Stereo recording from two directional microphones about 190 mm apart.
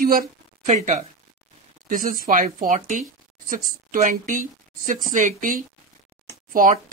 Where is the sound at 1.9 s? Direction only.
45° right (ahead or behind).